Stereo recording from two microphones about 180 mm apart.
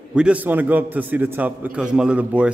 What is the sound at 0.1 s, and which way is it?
A man's voice, 5° right (ahead or behind).